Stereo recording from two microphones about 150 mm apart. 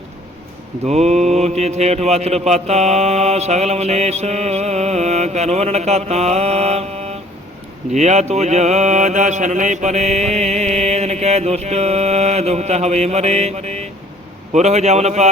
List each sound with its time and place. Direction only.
0.9 s mantra: 45° right (ahead or behind)